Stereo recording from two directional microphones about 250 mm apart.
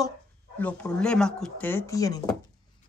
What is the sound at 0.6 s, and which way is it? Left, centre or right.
Speech, centre.